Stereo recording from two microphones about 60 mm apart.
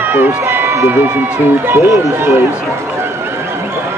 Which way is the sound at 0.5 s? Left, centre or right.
Right.